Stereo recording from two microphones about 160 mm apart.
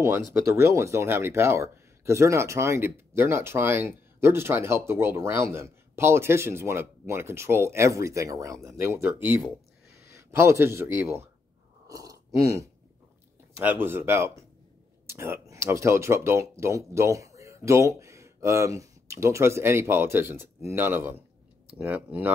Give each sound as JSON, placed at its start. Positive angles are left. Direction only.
{"t": 0.0, "sound": "a man's voice", "side_deg": -15}